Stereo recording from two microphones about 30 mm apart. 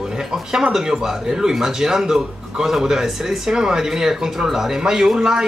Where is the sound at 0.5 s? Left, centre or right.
Right.